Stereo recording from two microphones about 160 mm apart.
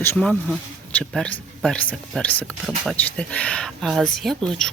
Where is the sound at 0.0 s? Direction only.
15° left (ahead or behind).